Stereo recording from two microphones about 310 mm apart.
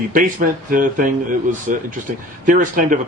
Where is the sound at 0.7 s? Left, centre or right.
Right.